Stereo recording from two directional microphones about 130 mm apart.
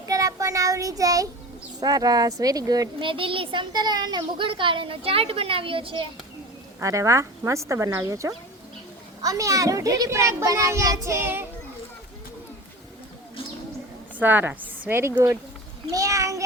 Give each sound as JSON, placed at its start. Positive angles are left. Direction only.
{"t": 0.0, "sound": "child singing", "side_deg": -25}
{"t": 1.8, "sound": "a child's voice", "side_deg": -30}
{"t": 3.0, "sound": "a child's voice", "side_deg": -40}
{"t": 6.7, "sound": "a child's voice", "side_deg": -25}
{"t": 14.2, "sound": "a woman's voice", "side_deg": -15}